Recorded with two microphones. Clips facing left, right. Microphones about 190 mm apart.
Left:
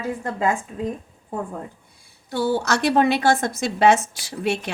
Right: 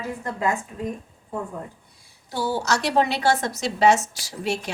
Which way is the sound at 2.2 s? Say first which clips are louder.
Left 3 dB; 60° left (ahead or behind).